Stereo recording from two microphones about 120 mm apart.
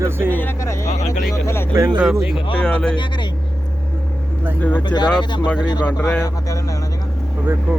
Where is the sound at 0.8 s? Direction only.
65° left (ahead or behind).